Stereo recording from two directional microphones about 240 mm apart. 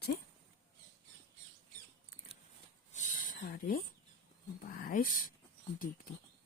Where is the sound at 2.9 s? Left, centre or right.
Left.